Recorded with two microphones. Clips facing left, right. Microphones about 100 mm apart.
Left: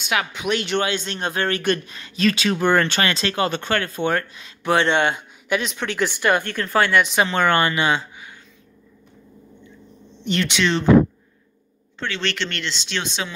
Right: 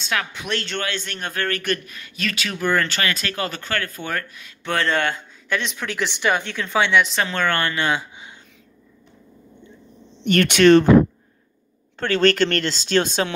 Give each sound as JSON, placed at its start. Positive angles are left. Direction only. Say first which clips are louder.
{"t": 0.0, "sound": "speech", "louder": "left 3 dB", "side_deg": 10}
{"t": 5.5, "sound": "speech", "louder": "left 2 dB", "side_deg": 0}
{"t": 7.3, "sound": "speech", "louder": "left 3 dB", "side_deg": 20}
{"t": 10.2, "sound": "speech", "louder": "right 7 dB", "side_deg": -55}
{"t": 12.0, "sound": "speech", "louder": "right 9 dB", "side_deg": -45}